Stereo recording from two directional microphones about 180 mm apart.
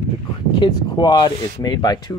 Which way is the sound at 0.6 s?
25° left (ahead or behind).